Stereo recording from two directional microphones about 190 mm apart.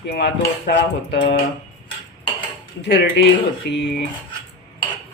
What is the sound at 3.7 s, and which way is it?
Speech, 60° left (ahead or behind).